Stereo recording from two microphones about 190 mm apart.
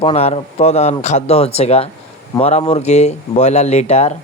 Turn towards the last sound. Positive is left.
turn(degrees=35)  # may be behind; listen again after turning